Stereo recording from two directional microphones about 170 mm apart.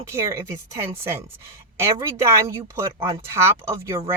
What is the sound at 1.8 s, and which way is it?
Speech, 15° right (ahead or behind).